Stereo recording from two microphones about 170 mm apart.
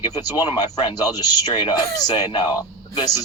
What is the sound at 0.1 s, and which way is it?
Speech, 20° left (ahead or behind).